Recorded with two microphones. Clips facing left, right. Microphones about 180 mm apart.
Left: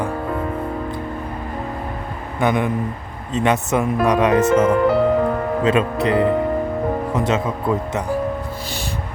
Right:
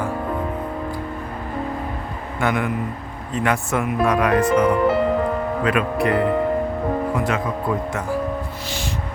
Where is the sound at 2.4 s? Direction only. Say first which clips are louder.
Left 3 dB; 20° left (ahead or behind).